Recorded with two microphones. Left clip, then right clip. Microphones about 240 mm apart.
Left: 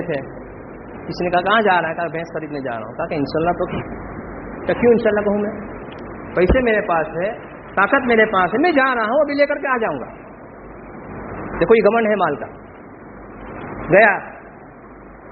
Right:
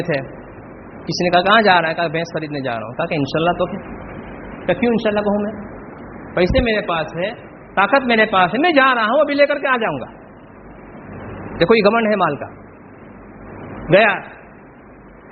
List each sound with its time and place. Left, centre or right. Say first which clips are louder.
1.1 s a man's voice: right 3 dB; right
4.6 s a man's voice: left 3 dB; right
11.6 s a man's voice: even; right
13.9 s a man's voice: left 1 dB; right